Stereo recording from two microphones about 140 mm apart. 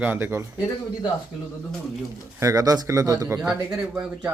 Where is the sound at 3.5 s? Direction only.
10° right (ahead or behind).